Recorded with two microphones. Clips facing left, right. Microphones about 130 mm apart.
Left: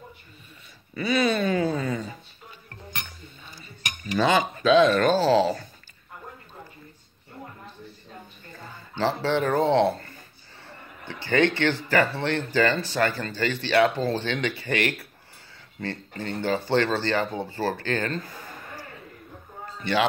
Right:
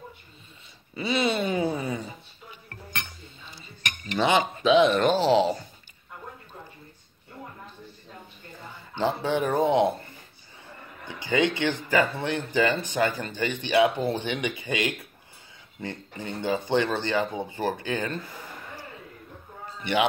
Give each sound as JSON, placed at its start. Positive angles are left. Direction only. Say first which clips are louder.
{"t": 0.9, "sound": "speech", "louder": "left 2 dB", "side_deg": -25}
{"t": 4.2, "sound": "speech", "louder": "left 1 dB", "side_deg": -20}
{"t": 8.9, "sound": "speech", "louder": "left 1 dB", "side_deg": -15}
{"t": 18.2, "sound": "a man's voice", "louder": "even", "side_deg": 50}
{"t": 19.8, "sound": "a man's voice", "louder": "left 1 dB", "side_deg": -15}